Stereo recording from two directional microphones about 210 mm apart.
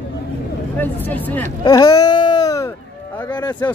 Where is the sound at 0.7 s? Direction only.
10° left (ahead or behind).